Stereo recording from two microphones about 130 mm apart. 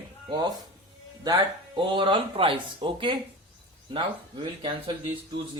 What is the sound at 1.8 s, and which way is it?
Speech, 40° right (ahead or behind).